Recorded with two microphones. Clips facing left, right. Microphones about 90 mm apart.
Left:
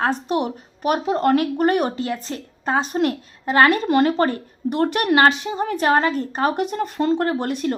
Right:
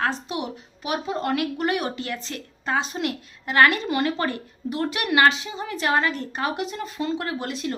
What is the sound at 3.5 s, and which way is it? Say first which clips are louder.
A woman's voice: left 3 dB; 35° left (ahead or behind).